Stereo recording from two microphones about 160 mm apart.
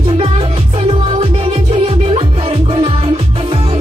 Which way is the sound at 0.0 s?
35° right (ahead or behind).